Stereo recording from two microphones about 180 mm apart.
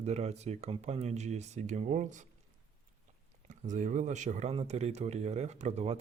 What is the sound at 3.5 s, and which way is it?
Speech, 45° right (ahead or behind).